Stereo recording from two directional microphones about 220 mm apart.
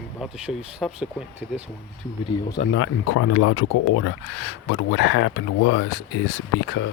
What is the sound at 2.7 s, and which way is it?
Speech, 75° left (ahead or behind).